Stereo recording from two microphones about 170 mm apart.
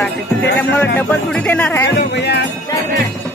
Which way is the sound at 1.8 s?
80° left.